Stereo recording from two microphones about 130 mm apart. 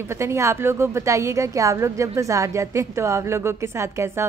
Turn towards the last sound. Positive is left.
turn(degrees=-20)  # may be behind; listen again after turning